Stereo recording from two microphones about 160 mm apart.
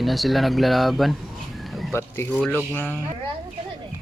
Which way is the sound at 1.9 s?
15° left (ahead or behind).